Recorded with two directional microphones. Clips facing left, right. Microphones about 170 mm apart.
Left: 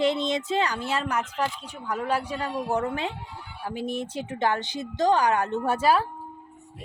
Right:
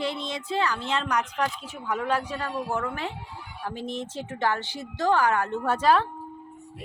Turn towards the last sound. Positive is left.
turn(degrees=10)  # may be behind; listen again after turning